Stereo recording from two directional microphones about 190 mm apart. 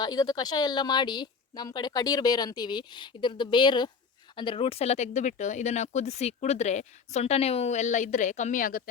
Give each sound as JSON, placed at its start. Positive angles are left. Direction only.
{"t": 0.0, "sound": "a woman's voice", "side_deg": 20}